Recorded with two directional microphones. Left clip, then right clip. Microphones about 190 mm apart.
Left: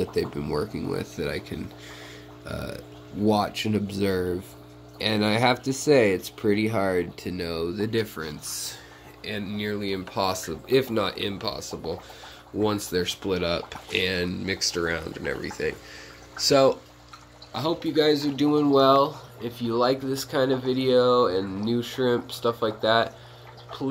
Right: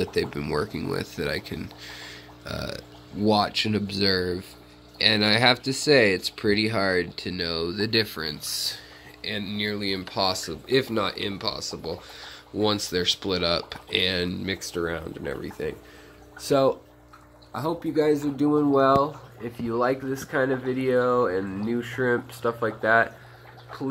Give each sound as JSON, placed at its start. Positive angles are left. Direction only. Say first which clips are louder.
{"t": 0.0, "sound": "speech", "louder": "right 1 dB", "side_deg": -5}
{"t": 19.4, "sound": "speech", "louder": "left 1 dB", "side_deg": -20}